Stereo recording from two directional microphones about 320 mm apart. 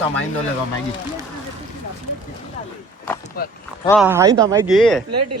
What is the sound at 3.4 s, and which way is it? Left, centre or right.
Speech, left.